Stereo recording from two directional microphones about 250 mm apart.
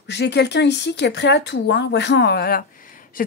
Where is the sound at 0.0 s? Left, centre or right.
Left.